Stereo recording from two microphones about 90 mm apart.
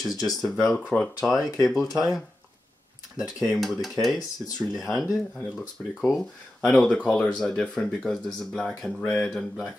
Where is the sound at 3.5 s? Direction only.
Centre (ahead or behind).